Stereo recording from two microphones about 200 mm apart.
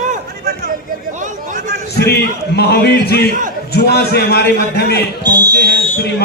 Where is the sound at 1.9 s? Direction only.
55° left (ahead or behind).